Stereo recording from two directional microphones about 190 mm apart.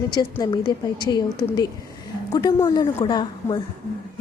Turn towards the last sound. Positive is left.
turn(degrees=25)  # may be behind; listen again after turning